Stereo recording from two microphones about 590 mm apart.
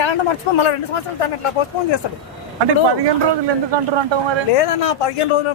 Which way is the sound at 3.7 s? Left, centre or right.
Right.